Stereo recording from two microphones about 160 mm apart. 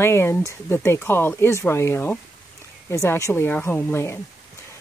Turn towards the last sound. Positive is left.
turn(degrees=15)  # may be behind; listen again after turning